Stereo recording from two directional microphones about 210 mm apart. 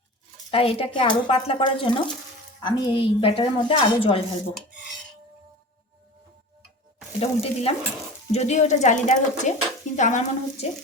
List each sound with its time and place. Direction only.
0.5 s a woman's voice: 25° left (ahead or behind)
7.2 s a woman's voice: 25° left (ahead or behind)